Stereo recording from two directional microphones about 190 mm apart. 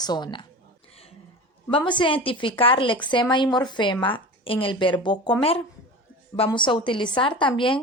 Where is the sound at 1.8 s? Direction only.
25° left (ahead or behind).